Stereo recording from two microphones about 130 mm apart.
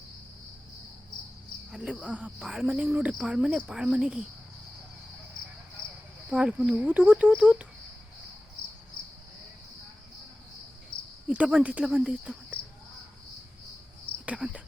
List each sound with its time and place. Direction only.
1.7 s speech: 10° right (ahead or behind)
6.3 s speech: 5° right (ahead or behind)
11.3 s speech: 10° right (ahead or behind)
14.3 s speech: 5° right (ahead or behind)